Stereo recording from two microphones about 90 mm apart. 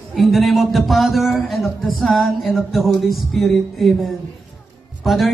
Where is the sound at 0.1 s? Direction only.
Centre (ahead or behind).